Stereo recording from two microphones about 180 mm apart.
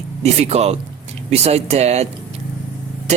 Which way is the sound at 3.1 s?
40° right (ahead or behind).